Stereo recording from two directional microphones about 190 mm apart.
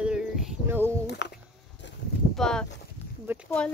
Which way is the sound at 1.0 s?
65° left (ahead or behind).